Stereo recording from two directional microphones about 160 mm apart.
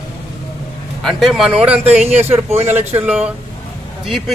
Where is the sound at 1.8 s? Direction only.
40° right (ahead or behind).